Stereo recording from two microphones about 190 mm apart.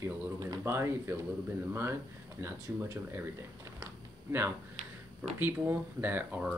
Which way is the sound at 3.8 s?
10° right (ahead or behind).